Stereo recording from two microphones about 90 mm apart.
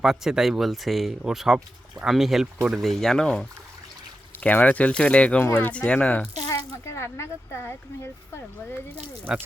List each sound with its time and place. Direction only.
0.0 s speech: 5° right (ahead or behind)
4.4 s speech: 15° left (ahead or behind)
6.5 s speech: 35° left (ahead or behind)